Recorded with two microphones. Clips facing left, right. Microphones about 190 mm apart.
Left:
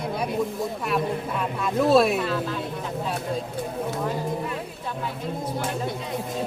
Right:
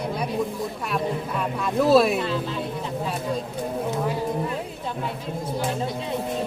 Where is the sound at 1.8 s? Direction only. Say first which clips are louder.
Right 1 dB; centre (ahead or behind).